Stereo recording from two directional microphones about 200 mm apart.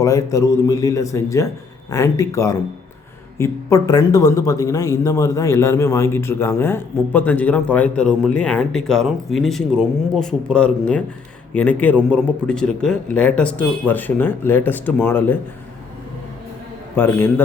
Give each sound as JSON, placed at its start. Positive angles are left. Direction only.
{"t": 0.0, "sound": "a man's voice", "side_deg": 15}
{"t": 16.9, "sound": "a man's voice", "side_deg": 10}